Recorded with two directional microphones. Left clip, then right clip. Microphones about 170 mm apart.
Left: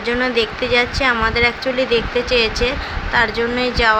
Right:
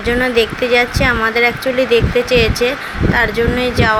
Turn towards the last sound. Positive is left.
turn(degrees=-10)  # may be behind; listen again after turning